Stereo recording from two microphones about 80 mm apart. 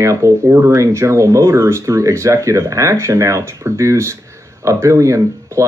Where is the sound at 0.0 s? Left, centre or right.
Right.